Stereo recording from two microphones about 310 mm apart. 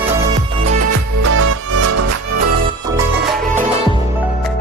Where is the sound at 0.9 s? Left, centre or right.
Right.